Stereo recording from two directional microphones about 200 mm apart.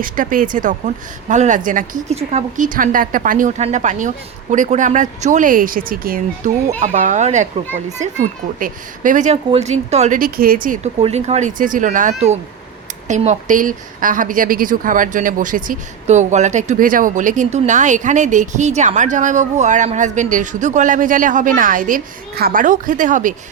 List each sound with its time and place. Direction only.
0.0 s a woman's voice: 45° right (ahead or behind)
6.7 s a woman's voice: 35° right (ahead or behind)
11.0 s a woman's voice: 30° right (ahead or behind)